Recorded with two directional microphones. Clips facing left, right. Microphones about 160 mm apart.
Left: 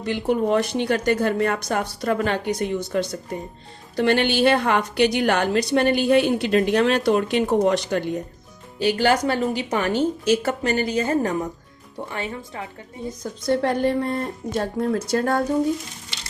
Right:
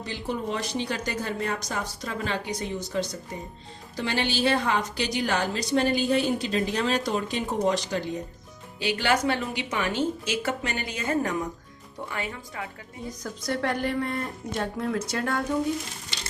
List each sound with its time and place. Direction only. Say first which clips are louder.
0.0 s a woman's voice: left 9 dB; 60° left (ahead or behind)
8.8 s speech: left 5 dB; 40° left (ahead or behind)